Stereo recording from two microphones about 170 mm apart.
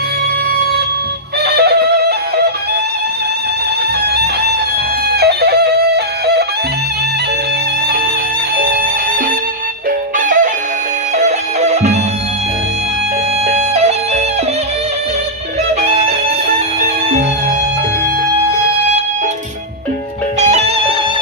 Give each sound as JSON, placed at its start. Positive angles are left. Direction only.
{"t": 1.5, "sound": "music", "side_deg": -70}
{"t": 5.1, "sound": "music", "side_deg": -70}
{"t": 8.5, "sound": "music", "side_deg": -60}
{"t": 10.2, "sound": "music", "side_deg": -50}
{"t": 13.5, "sound": "music", "side_deg": -40}
{"t": 20.4, "sound": "music", "side_deg": -40}